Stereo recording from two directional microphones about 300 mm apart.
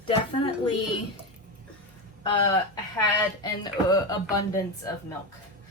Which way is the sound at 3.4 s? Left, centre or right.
Centre.